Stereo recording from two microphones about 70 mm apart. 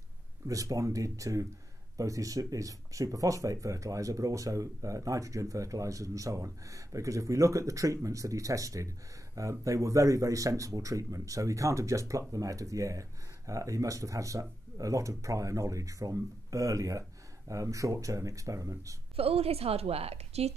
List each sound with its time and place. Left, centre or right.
0.5 s speech: right